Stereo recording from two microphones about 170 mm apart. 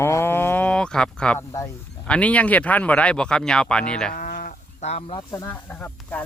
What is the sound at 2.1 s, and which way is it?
Speech, 10° left (ahead or behind).